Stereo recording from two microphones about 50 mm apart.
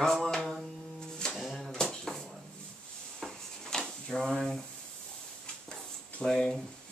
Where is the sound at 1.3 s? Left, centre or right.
Centre.